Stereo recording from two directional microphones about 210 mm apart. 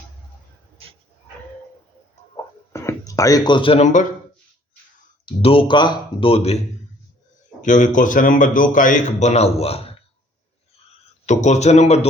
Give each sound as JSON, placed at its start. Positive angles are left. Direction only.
{"t": 2.3, "sound": "a sound", "side_deg": 15}
{"t": 5.2, "sound": "speech", "side_deg": 25}
{"t": 7.6, "sound": "speech", "side_deg": 35}
{"t": 11.3, "sound": "speech", "side_deg": 35}